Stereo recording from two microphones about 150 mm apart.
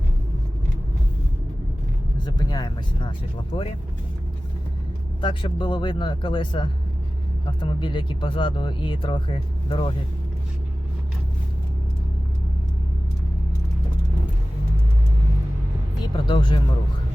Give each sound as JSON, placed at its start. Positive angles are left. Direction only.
{"t": 2.1, "sound": "speech", "side_deg": 30}
{"t": 5.2, "sound": "speech", "side_deg": 30}
{"t": 16.1, "sound": "speech", "side_deg": 30}